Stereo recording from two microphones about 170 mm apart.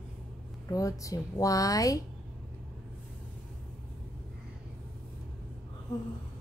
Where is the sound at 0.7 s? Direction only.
20° left (ahead or behind).